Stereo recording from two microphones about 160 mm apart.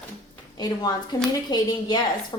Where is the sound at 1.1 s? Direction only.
25° left (ahead or behind).